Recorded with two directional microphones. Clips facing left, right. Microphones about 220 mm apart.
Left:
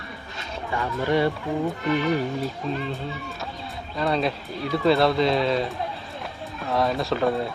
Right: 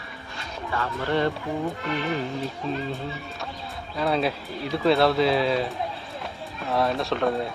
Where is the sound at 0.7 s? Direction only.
15° left (ahead or behind).